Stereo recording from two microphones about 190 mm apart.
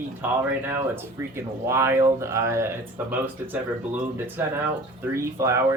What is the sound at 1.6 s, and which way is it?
Speech, 15° right (ahead or behind).